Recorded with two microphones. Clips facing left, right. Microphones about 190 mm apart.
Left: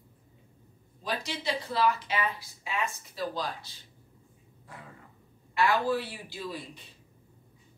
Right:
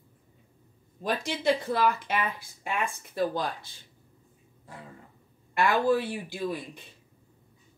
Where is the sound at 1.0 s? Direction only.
50° right (ahead or behind).